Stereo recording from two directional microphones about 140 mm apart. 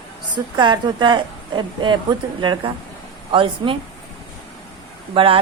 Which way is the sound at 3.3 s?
40° right (ahead or behind).